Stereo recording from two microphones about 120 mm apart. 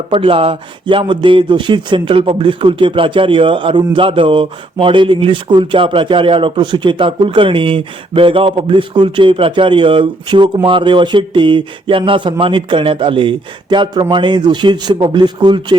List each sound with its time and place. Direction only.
0.1 s speech: 50° right (ahead or behind)